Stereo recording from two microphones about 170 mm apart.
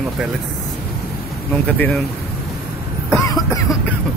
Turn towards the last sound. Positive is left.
turn(degrees=20)  # may be behind; listen again after turning